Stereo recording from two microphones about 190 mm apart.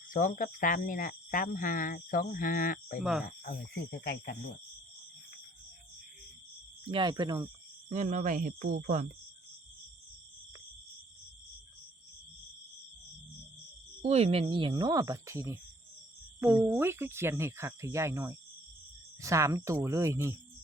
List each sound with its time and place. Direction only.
0.1 s speech: 45° left (ahead or behind)
3.0 s speech: 5° right (ahead or behind)
3.8 s speech: 50° left (ahead or behind)
6.8 s speech: 25° right (ahead or behind)
7.9 s speech: 40° right (ahead or behind)
14.0 s speech: 35° right (ahead or behind); by 20.3 s 15° right (ahead or behind)